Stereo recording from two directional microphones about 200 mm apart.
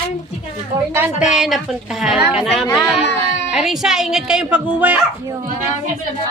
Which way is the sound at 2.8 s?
10° left (ahead or behind).